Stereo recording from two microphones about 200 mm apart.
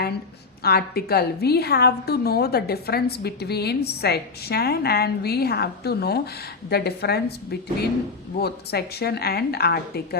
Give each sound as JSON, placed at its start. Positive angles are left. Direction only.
{"t": 0.6, "sound": "a woman's voice", "side_deg": 50}